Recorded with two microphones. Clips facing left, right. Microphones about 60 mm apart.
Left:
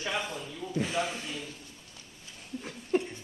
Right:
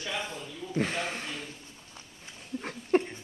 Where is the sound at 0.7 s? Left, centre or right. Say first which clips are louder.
Even; right.